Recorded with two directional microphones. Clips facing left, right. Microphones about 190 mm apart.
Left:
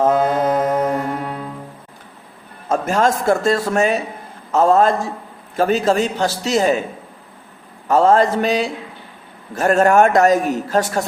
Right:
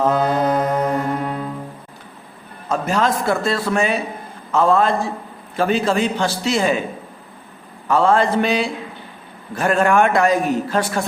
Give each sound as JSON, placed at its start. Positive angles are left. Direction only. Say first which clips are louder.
{"t": 0.1, "sound": "mantra", "louder": "left 1 dB", "side_deg": 10}
{"t": 1.2, "sound": "music", "louder": "right 2 dB", "side_deg": 5}
{"t": 2.6, "sound": "a man's voice", "louder": "left 2 dB", "side_deg": 45}
{"t": 7.9, "sound": "a man's voice", "louder": "left 2 dB", "side_deg": 40}